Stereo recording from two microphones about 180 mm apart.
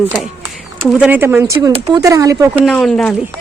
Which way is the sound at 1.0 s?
10° right (ahead or behind).